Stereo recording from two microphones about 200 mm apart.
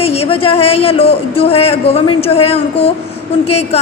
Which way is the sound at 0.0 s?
30° left (ahead or behind).